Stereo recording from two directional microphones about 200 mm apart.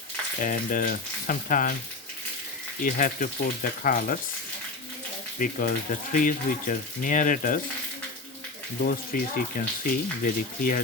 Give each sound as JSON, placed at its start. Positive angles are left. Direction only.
{"t": 0.4, "sound": "speech", "side_deg": 45}
{"t": 2.8, "sound": "speech", "side_deg": 45}
{"t": 5.4, "sound": "speech", "side_deg": 40}
{"t": 8.8, "sound": "speech", "side_deg": 45}